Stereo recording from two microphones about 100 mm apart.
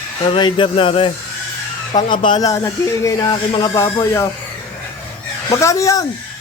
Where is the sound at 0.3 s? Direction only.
55° left (ahead or behind).